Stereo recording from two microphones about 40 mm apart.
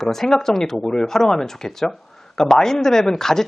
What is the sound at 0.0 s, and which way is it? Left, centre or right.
Speech, centre.